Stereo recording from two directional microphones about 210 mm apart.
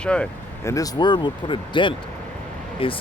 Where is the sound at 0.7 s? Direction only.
15° left (ahead or behind).